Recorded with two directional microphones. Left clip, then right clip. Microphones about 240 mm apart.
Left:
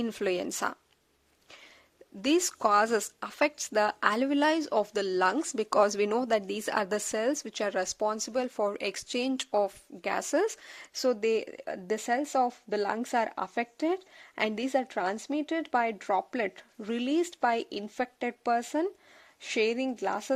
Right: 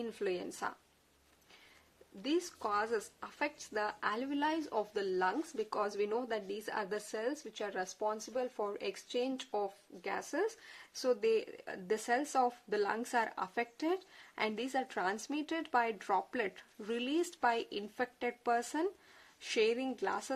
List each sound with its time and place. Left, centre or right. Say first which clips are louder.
0.0 s speech: left 8 dB; left
2.2 s speech: left 10 dB; left